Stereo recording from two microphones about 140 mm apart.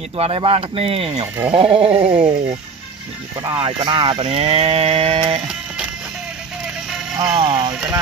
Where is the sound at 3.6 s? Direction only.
40° right (ahead or behind).